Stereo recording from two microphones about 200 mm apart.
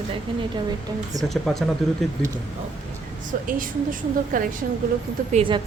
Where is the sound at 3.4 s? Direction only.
45° right (ahead or behind).